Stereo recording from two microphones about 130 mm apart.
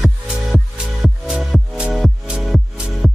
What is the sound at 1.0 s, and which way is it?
Music, 5° right (ahead or behind).